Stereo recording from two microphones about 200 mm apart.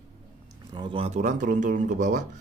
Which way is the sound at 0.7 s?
25° right (ahead or behind).